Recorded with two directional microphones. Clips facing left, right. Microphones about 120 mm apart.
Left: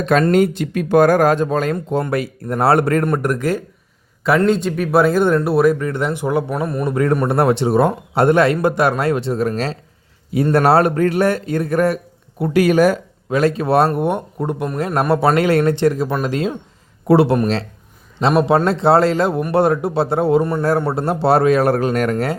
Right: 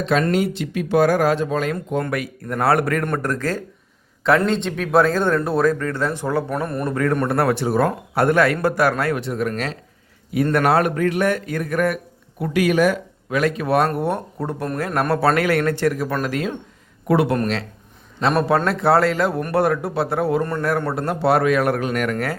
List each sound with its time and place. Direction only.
0.0 s speech: 50° left (ahead or behind)
1.7 s speech: 30° left (ahead or behind)
3.2 s speech: 15° left (ahead or behind)
4.4 s speech: 5° left (ahead or behind)
6.5 s speech: 5° left (ahead or behind)
6.9 s speech: 20° left (ahead or behind)
18.3 s speech: 25° left (ahead or behind)